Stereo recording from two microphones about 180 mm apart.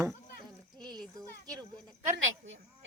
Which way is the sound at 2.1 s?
90° right.